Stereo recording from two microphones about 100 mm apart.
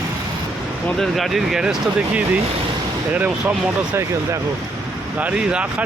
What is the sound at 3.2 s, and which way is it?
Speech, 15° right (ahead or behind).